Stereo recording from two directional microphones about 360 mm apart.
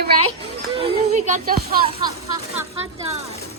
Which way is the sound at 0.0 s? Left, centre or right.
Right.